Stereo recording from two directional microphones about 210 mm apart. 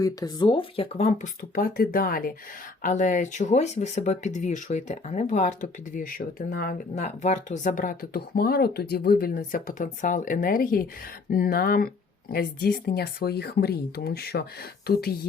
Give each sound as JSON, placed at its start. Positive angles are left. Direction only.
{"t": 0.0, "sound": "speech", "side_deg": 15}
{"t": 1.5, "sound": "speech", "side_deg": 45}